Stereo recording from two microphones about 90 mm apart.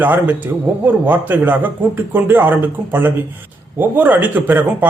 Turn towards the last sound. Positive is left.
turn(degrees=-20)  # may be behind; listen again after turning